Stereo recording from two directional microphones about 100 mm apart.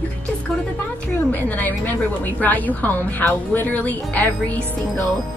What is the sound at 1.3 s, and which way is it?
A woman's voice, 15° left (ahead or behind).